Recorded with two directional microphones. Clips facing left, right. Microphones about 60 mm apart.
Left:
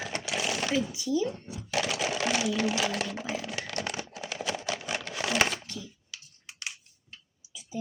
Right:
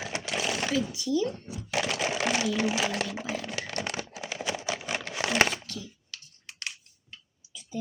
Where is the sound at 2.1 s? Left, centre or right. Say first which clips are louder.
Right 1 dB; centre.